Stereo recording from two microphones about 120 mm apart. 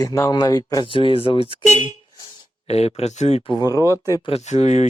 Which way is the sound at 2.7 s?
60° left (ahead or behind).